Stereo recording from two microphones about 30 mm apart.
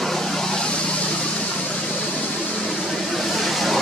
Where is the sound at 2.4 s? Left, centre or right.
Left.